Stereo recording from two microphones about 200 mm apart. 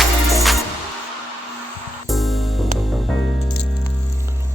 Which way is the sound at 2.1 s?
Centre (ahead or behind).